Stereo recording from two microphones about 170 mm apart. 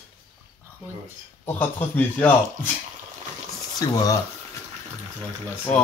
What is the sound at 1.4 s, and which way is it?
Speech, 10° left (ahead or behind).